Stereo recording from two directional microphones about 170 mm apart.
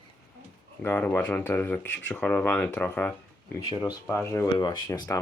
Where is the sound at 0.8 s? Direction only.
10° left (ahead or behind).